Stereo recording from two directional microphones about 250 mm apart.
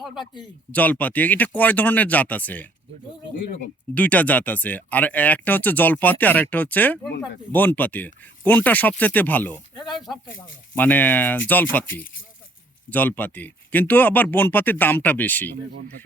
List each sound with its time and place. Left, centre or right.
0.7 s speech: centre
3.9 s speech: centre
9.7 s speech: centre
10.8 s speech: centre
12.9 s speech: centre